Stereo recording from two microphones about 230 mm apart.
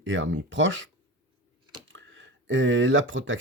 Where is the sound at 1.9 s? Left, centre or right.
Right.